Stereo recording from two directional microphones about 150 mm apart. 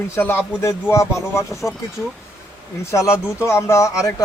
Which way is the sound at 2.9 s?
20° left (ahead or behind).